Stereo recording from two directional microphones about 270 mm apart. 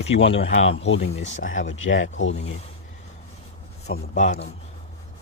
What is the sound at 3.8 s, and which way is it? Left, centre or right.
Speech, left.